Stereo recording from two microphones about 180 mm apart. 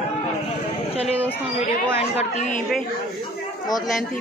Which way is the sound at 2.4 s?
45° left (ahead or behind).